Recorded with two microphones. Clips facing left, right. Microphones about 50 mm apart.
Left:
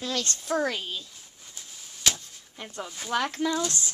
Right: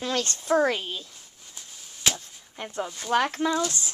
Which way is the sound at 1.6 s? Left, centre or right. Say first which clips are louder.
Even; centre.